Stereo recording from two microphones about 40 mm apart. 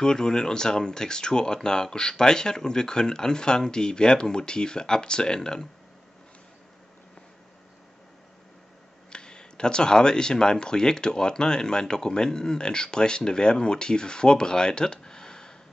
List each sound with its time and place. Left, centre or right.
0.0 s speech: centre
9.1 s speech: left